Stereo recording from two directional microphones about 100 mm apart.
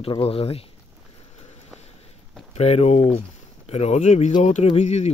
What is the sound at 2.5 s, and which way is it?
Speech, 90° left.